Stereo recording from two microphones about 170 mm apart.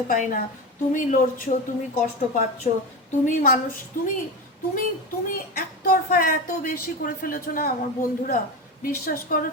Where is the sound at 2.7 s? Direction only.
40° left (ahead or behind).